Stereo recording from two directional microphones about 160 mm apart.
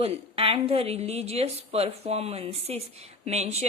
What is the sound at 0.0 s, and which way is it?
Speech, 35° right (ahead or behind).